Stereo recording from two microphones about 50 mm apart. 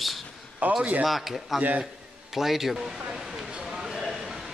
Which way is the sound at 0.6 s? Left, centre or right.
Right.